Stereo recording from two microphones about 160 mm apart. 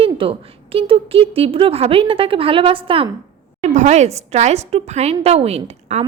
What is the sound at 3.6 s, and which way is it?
A woman's voice, 45° right (ahead or behind).